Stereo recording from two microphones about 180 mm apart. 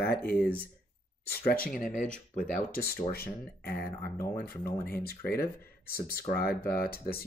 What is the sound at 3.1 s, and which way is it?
Speech, 55° left (ahead or behind).